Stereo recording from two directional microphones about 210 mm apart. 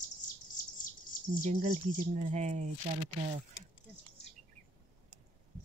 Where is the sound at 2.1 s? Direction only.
35° right (ahead or behind).